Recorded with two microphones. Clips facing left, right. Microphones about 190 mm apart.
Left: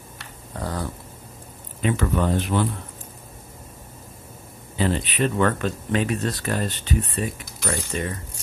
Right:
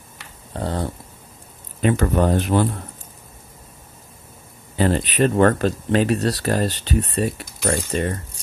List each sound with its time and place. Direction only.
0.5 s dog: 30° right (ahead or behind)
1.8 s speech: 45° right (ahead or behind)
4.7 s speech: 45° right (ahead or behind)